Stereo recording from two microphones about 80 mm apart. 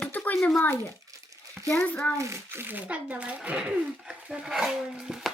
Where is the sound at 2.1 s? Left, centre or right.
Right; by 5.2 s centre.